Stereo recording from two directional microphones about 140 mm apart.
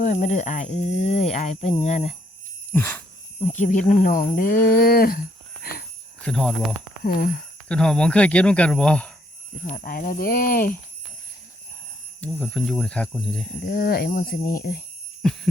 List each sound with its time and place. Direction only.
0.0 s speech: 65° left (ahead or behind)
2.7 s speech: 15° left (ahead or behind)
3.4 s speech: 60° left (ahead or behind); by 5.2 s 90° left
6.2 s speech: 5° left (ahead or behind)
7.0 s speech: 90° left
7.7 s speech: 5° left (ahead or behind)
9.7 s speech: 90° left
12.2 s speech: 10° left (ahead or behind)
13.7 s speech: 90° left
15.2 s a sound: 5° left (ahead or behind)